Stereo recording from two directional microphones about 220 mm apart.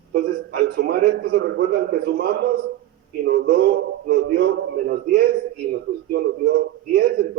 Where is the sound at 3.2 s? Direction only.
45° right (ahead or behind).